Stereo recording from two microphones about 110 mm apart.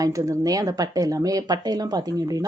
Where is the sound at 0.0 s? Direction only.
30° right (ahead or behind).